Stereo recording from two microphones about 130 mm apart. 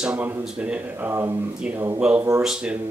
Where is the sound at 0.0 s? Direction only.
10° right (ahead or behind).